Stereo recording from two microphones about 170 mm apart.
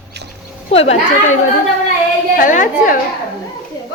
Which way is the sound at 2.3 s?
50° left (ahead or behind).